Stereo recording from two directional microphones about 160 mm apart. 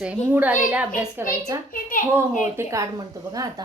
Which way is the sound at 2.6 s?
20° right (ahead or behind).